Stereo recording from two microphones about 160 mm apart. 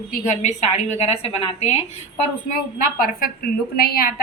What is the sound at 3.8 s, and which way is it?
Speech, 65° left (ahead or behind).